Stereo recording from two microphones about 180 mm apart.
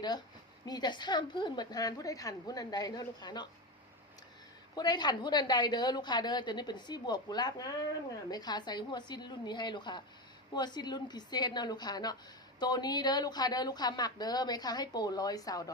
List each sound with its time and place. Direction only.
0.6 s speech: 25° left (ahead or behind)
4.7 s speech: 25° left (ahead or behind)